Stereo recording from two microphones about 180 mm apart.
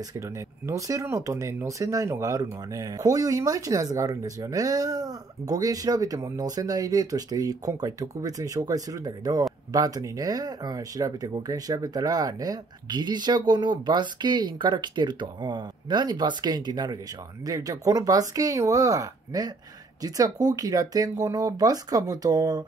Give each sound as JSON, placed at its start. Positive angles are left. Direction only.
{"t": 0.7, "sound": "speech", "side_deg": -20}